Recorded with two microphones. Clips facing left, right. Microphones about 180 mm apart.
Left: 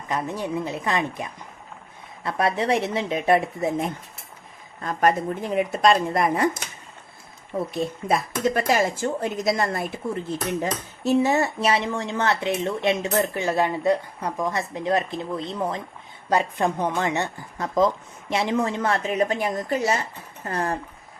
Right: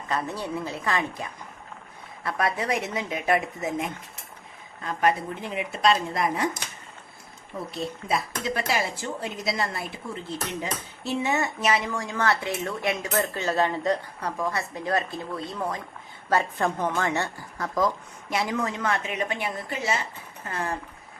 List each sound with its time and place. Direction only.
0.1 s speech: 15° left (ahead or behind); by 3.9 s 30° left (ahead or behind)
4.8 s speech: 45° left (ahead or behind)
7.7 s speech: 50° left (ahead or behind)